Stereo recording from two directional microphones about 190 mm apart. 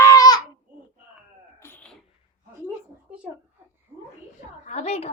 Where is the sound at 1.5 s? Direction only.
10° left (ahead or behind).